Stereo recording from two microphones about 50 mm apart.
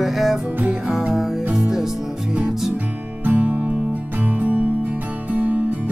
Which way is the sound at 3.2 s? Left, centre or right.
Right.